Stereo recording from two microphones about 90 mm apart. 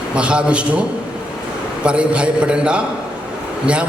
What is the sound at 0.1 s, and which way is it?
A man's voice, 10° right (ahead or behind).